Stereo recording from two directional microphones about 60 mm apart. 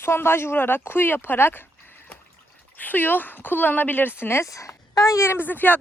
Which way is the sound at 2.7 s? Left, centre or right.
Left.